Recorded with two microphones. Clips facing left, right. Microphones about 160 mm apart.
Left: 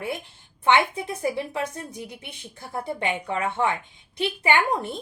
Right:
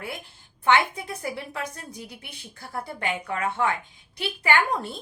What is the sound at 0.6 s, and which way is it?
A woman's voice, 20° left (ahead or behind).